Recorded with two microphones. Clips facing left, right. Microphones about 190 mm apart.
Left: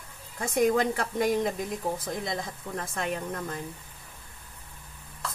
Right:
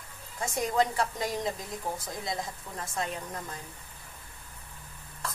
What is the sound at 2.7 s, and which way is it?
Speech, 60° left (ahead or behind).